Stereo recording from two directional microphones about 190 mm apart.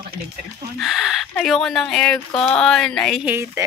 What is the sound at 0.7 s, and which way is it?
Speech, centre (ahead or behind).